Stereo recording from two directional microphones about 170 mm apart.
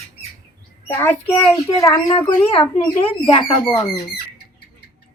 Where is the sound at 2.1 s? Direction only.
35° left (ahead or behind).